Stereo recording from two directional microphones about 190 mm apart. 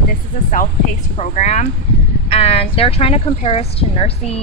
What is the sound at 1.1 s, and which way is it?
Speech, 40° left (ahead or behind).